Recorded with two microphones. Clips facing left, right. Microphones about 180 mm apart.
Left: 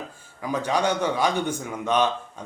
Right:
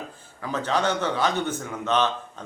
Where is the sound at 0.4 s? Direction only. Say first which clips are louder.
Left 1 dB; 10° left (ahead or behind).